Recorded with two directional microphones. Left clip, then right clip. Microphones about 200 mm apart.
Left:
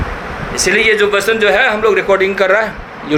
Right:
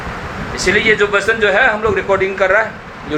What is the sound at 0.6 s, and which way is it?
A man's voice, 30° left (ahead or behind).